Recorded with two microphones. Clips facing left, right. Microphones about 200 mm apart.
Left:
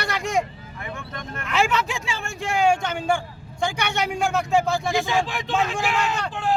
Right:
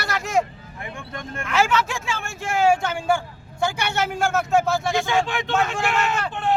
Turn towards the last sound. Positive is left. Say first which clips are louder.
# right 1 dB
turn(degrees=0)  # may be behind; listen again after turning